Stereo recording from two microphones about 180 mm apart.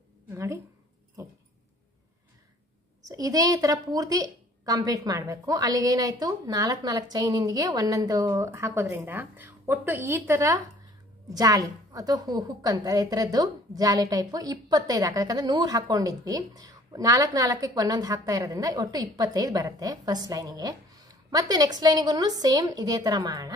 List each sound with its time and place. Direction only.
0.3 s a woman's voice: 15° right (ahead or behind)
3.1 s a woman's voice: 20° right (ahead or behind)